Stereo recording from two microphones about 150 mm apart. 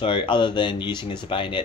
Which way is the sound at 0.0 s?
35° left (ahead or behind).